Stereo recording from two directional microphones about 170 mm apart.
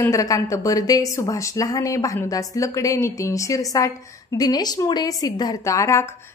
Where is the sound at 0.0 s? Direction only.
20° left (ahead or behind).